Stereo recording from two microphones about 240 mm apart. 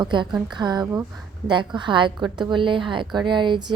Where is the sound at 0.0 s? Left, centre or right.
Centre.